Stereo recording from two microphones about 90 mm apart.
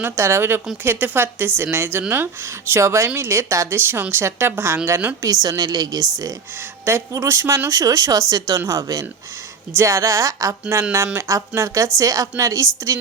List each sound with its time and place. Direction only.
0.0 s speech: 30° right (ahead or behind)
5.2 s speech: 45° right (ahead or behind)
6.8 s speech: 30° right (ahead or behind)